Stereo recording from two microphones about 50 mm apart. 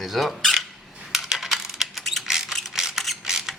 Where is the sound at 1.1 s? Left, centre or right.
Centre.